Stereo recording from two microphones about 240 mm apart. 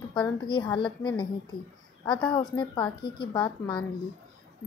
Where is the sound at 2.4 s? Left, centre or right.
Centre.